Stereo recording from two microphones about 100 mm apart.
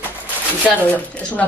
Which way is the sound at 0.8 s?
15° left (ahead or behind).